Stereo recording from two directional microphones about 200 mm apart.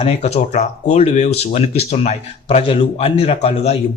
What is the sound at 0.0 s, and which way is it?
Speech, 35° left (ahead or behind).